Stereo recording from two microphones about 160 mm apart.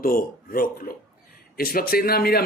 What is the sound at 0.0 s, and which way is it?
A man's voice, 65° left (ahead or behind).